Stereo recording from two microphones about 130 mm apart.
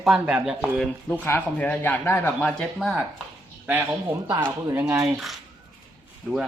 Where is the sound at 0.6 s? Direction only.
10° left (ahead or behind).